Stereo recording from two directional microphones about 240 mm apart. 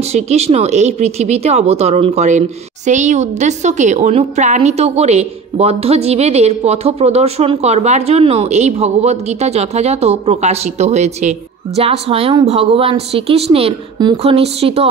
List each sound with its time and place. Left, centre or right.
0.1 s a woman's voice: right